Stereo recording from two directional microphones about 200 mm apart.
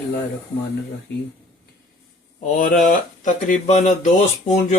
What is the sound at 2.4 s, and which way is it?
Speech, 40° left (ahead or behind).